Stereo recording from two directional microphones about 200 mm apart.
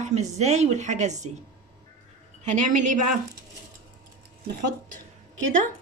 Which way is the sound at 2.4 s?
35° right (ahead or behind).